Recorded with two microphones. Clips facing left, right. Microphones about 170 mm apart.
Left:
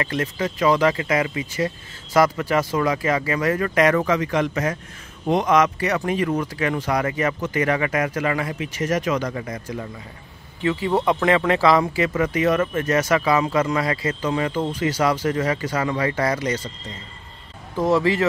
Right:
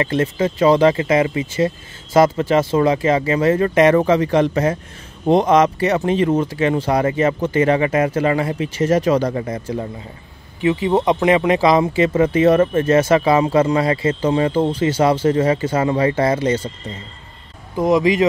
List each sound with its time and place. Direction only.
0.0 s speech: 25° right (ahead or behind)
10.6 s speech: 20° right (ahead or behind)
17.7 s speech: 15° right (ahead or behind)